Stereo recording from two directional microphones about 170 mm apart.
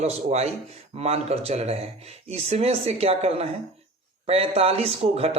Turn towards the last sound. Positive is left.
turn(degrees=-35)  # may be behind; listen again after turning